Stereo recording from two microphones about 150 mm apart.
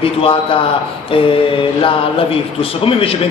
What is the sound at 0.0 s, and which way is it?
Speech, 35° left (ahead or behind).